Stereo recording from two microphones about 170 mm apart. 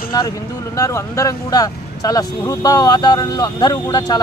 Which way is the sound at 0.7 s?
20° left (ahead or behind).